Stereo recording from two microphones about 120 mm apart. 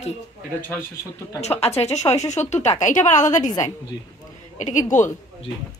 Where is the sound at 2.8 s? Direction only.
90° left.